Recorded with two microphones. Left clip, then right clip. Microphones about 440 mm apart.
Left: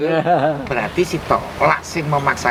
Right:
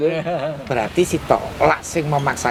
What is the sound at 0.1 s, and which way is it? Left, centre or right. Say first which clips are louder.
Speech: left 7 dB; left.